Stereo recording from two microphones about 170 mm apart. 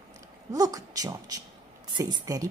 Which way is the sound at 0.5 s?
20° right (ahead or behind).